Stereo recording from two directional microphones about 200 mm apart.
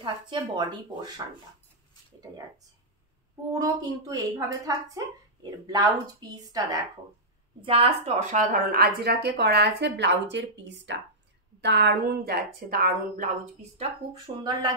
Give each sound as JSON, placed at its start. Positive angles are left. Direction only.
{"t": 0.0, "sound": "speech", "side_deg": -20}
{"t": 3.5, "sound": "a woman's voice", "side_deg": -15}
{"t": 7.6, "sound": "speech", "side_deg": -25}